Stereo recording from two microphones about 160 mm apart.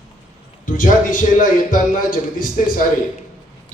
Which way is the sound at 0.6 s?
55° left (ahead or behind).